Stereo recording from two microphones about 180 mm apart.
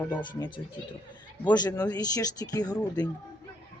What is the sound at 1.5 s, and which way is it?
A man's voice, 20° left (ahead or behind).